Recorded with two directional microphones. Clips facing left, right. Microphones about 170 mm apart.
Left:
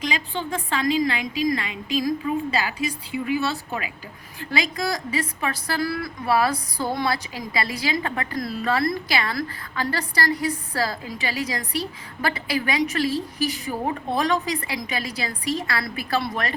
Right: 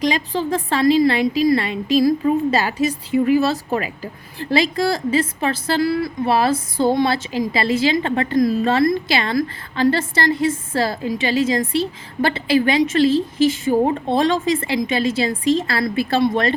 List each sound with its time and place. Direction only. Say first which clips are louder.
0.0 s a woman's voice: right 8 dB; 40° right (ahead or behind)